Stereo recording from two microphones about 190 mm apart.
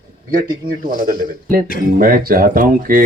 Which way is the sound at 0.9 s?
50° right (ahead or behind).